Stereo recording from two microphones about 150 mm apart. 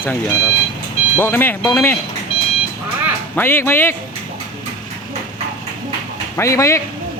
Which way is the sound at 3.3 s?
15° left (ahead or behind).